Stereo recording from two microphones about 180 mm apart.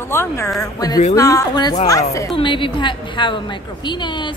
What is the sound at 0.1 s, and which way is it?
A woman's voice, 15° left (ahead or behind).